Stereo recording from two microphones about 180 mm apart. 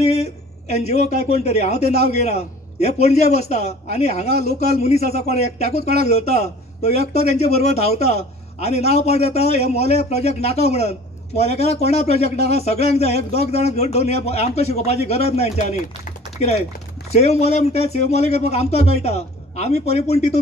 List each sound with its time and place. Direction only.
0.0 s a man's voice: 35° left (ahead or behind)